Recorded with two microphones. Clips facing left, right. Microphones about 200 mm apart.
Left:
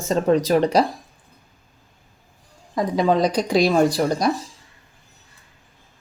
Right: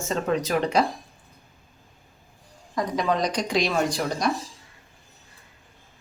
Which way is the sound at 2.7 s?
30° left (ahead or behind).